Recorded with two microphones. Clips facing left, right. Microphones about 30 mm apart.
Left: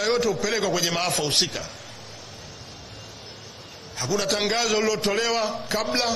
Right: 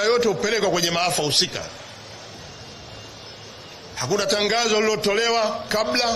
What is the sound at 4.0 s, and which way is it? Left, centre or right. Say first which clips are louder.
A man's voice: right 3 dB; centre.